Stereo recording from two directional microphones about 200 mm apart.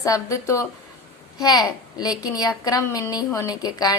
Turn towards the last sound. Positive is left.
turn(degrees=20)  # may be behind; listen again after turning